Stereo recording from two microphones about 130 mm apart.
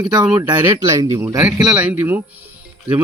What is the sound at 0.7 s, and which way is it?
Speech, 25° right (ahead or behind).